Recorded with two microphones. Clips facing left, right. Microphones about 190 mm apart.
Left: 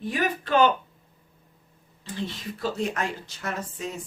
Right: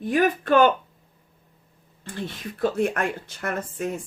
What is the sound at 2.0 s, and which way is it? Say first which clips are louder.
A woman's voice: even; 55° right (ahead or behind).